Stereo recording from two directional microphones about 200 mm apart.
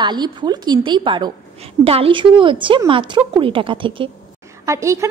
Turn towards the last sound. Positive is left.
turn(degrees=-15)  # may be behind; listen again after turning